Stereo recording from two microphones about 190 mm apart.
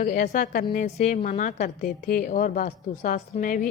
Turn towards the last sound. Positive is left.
turn(degrees=45)  # may be behind; listen again after turning